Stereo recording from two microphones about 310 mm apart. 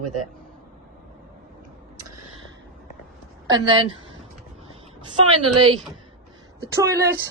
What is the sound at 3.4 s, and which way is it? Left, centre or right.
Speech, centre.